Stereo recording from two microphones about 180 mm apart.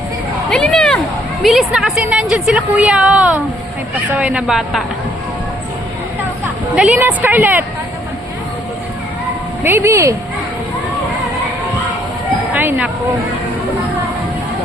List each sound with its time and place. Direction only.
0.5 s a sound: 5° left (ahead or behind)
1.4 s a woman's voice: centre (ahead or behind)
6.7 s a woman's voice: 5° right (ahead or behind)
9.6 s a woman's voice: 15° right (ahead or behind)
12.5 s speech: 10° right (ahead or behind)